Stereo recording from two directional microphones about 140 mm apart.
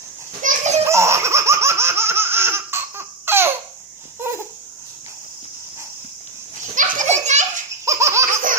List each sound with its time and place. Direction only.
0.4 s children playing: 55° right (ahead or behind)
0.9 s laughter: 20° right (ahead or behind)
4.2 s a sound: 20° right (ahead or behind)
6.7 s children playing: 65° right (ahead or behind)
7.9 s laughter: 20° right (ahead or behind)